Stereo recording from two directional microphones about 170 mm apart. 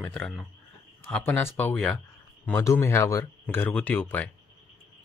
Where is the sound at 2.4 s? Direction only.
15° left (ahead or behind).